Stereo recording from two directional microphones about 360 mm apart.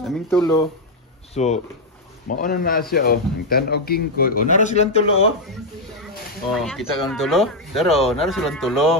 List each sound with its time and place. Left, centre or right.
0.0 s a man's voice: centre
6.5 s speech: centre